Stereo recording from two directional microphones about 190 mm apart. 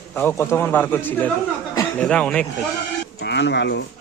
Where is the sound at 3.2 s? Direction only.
65° left (ahead or behind).